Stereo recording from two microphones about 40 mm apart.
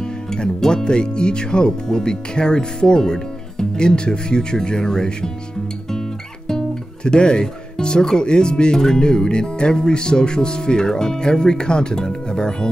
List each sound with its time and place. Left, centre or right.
0.3 s speech: centre
7.1 s speech: left